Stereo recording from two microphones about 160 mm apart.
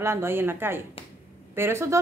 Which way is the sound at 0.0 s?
15° right (ahead or behind).